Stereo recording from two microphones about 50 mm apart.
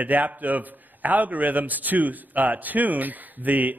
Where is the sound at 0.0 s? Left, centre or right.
Right.